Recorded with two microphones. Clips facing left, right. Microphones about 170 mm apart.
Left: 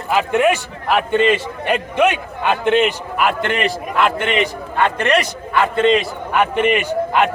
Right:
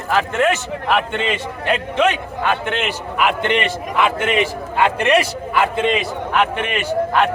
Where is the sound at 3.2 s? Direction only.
Centre (ahead or behind).